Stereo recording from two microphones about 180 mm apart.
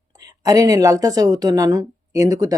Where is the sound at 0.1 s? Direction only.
20° right (ahead or behind).